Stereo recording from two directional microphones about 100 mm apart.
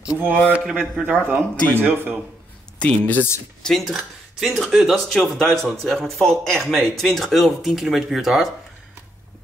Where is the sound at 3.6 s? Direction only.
Centre (ahead or behind).